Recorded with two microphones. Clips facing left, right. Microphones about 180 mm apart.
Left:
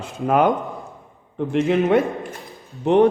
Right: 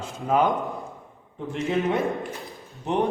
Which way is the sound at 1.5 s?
75° left (ahead or behind).